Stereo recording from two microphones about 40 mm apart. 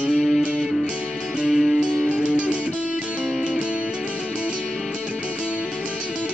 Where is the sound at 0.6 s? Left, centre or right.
Centre.